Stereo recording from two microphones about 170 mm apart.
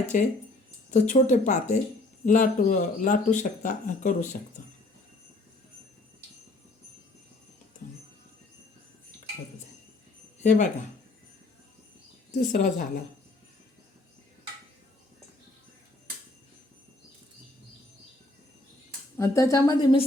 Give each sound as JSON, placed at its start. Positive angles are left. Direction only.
{"t": 0.1, "sound": "speech", "side_deg": 50}
{"t": 10.4, "sound": "speech", "side_deg": 45}
{"t": 12.3, "sound": "speech", "side_deg": 50}
{"t": 19.1, "sound": "a woman's voice", "side_deg": 15}